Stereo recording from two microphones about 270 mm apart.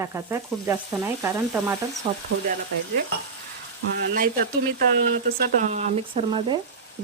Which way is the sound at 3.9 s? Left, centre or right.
Right.